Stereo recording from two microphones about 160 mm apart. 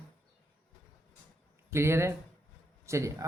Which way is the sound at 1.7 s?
15° right (ahead or behind).